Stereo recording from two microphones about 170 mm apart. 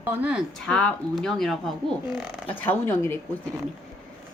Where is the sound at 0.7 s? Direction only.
5° left (ahead or behind).